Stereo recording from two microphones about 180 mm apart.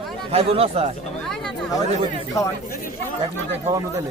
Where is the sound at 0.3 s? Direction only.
30° right (ahead or behind).